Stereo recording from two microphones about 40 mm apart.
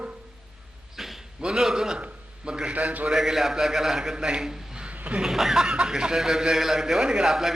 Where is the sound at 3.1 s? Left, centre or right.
Centre.